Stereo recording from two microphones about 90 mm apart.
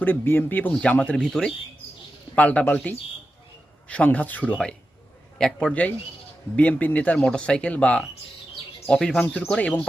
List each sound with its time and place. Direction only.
0.0 s speech: 25° left (ahead or behind)
3.8 s speech: 15° left (ahead or behind)
9.2 s speech: 25° left (ahead or behind)